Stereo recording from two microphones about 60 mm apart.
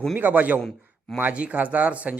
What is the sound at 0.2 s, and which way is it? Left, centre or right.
A man's voice, right.